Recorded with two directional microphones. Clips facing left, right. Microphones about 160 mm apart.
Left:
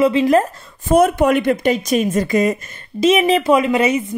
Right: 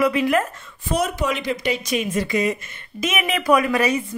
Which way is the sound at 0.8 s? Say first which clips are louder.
Left 9 dB; 50° left (ahead or behind).